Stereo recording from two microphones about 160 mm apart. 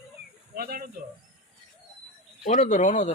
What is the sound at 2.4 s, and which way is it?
Speech, 50° left (ahead or behind).